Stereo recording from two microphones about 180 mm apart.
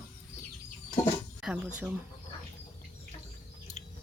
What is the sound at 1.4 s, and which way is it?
Speech, 5° right (ahead or behind).